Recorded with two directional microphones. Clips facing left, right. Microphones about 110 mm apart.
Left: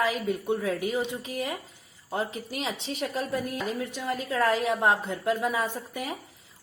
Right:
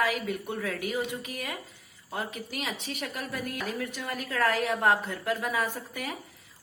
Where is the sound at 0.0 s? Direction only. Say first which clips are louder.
Left 2 dB; 20° left (ahead or behind).